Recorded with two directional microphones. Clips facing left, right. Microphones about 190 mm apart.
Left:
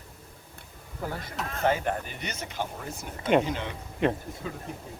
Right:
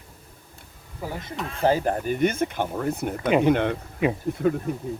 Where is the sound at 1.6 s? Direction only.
35° right (ahead or behind); by 4.4 s 60° right (ahead or behind).